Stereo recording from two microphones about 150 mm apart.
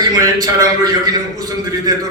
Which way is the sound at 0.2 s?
25° right (ahead or behind).